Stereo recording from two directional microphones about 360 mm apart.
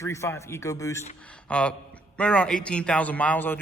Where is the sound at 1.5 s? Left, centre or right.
Centre.